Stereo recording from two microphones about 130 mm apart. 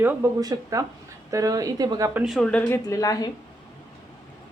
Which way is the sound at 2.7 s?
25° left (ahead or behind).